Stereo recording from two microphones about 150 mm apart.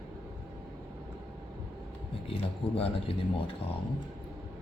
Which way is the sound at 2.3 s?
40° left (ahead or behind).